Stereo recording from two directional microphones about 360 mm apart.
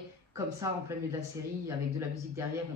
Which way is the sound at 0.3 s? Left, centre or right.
Centre.